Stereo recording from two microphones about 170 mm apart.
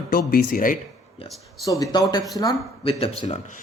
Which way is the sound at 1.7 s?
20° left (ahead or behind).